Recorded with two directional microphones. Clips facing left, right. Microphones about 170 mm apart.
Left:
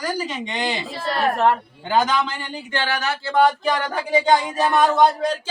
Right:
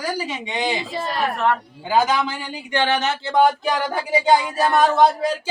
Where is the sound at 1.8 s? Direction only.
10° right (ahead or behind).